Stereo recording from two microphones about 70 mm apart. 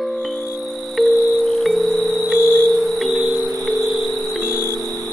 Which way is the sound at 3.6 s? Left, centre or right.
Centre.